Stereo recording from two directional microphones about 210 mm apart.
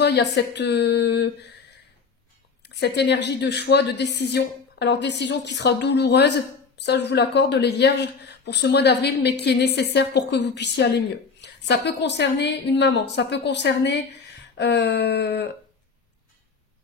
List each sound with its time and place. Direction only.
0.0 s speech: 55° left (ahead or behind)
2.6 s speech: 50° left (ahead or behind)